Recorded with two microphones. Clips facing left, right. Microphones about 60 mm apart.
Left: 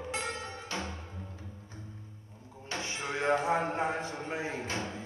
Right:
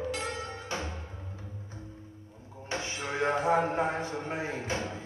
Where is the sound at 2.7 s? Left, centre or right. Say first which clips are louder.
Right 2 dB; right.